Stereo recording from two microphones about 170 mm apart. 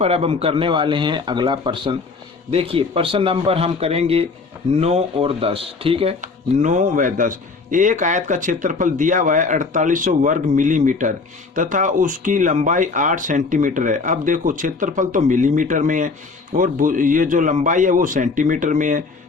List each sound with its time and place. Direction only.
0.0 s a man's voice: 35° right (ahead or behind)
6.2 s speech: 45° right (ahead or behind)